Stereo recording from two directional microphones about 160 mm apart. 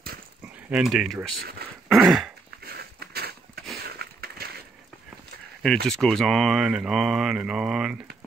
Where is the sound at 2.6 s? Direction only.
80° right.